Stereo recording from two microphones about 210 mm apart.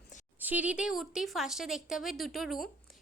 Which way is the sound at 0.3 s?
5° right (ahead or behind).